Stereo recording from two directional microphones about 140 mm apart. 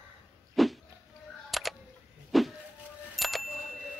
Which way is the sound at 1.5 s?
Centre (ahead or behind).